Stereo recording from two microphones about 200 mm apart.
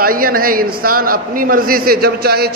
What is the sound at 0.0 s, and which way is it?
A man's voice, 45° right (ahead or behind).